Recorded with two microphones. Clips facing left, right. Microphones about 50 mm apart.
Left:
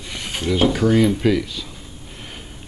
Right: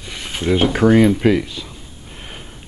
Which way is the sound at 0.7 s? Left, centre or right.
Right.